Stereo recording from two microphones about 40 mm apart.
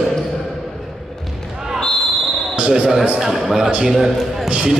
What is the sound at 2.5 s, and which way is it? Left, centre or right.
Basketball bounce, right.